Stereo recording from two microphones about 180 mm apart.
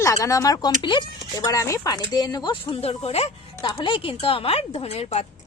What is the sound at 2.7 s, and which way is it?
A woman's voice, 35° left (ahead or behind).